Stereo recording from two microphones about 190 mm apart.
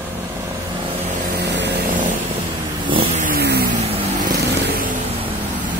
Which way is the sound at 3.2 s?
55° right (ahead or behind).